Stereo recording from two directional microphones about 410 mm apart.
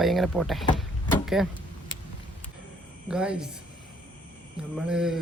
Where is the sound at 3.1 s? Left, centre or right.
Centre.